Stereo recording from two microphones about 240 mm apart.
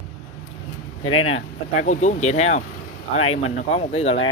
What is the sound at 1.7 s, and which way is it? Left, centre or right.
Speech, left.